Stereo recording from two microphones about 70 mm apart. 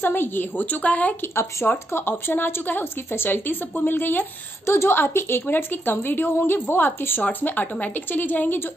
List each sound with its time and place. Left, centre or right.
0.0 s a woman's voice: left
1.3 s a woman's voice: left